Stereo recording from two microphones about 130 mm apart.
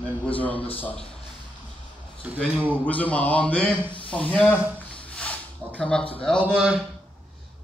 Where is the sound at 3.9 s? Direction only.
10° left (ahead or behind).